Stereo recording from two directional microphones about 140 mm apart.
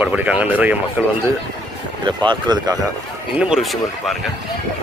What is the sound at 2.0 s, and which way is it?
Speech, 35° right (ahead or behind).